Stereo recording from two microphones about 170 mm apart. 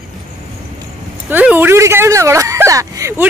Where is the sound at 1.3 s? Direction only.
10° right (ahead or behind).